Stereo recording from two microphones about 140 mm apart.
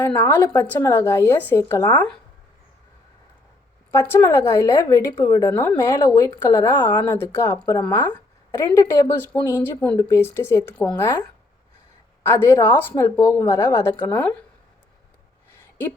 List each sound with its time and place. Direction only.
0.0 s a woman's voice: 15° left (ahead or behind)
3.9 s a woman's voice: 20° left (ahead or behind)
12.4 s speech: 20° left (ahead or behind)